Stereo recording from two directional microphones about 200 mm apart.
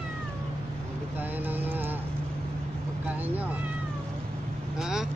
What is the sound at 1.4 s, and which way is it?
Speech, 10° right (ahead or behind).